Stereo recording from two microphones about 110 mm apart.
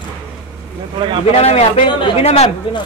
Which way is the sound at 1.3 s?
70° left (ahead or behind).